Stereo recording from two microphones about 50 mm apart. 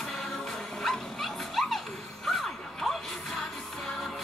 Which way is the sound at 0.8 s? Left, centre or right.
Centre.